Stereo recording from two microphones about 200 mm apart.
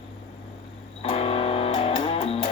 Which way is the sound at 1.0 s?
30° left (ahead or behind).